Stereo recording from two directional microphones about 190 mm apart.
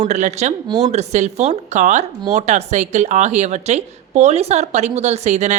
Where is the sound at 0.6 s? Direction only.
20° right (ahead or behind).